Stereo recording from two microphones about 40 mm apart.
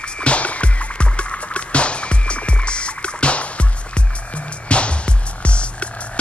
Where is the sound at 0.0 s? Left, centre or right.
Left.